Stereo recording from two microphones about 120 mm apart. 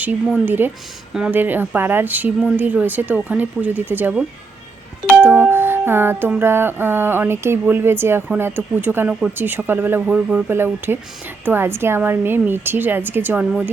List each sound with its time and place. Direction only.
0.4 s speech: 15° right (ahead or behind)
5.1 s music: 20° right (ahead or behind)
8.3 s speech: 20° right (ahead or behind)
10.5 s music: 20° right (ahead or behind)
11.4 s speech: 20° right (ahead or behind)